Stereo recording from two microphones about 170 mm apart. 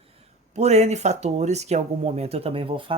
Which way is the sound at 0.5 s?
40° right (ahead or behind).